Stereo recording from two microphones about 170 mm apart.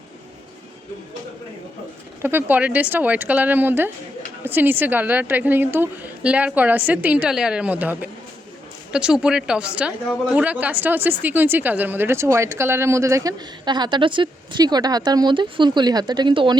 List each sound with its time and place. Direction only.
2.2 s a woman's voice: 10° right (ahead or behind); by 16.6 s 30° right (ahead or behind)